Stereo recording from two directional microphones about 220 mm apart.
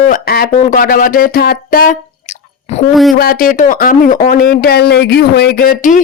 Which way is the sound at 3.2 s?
40° left (ahead or behind).